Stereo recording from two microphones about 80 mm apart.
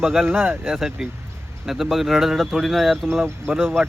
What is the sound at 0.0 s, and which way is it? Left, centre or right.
Speech, centre.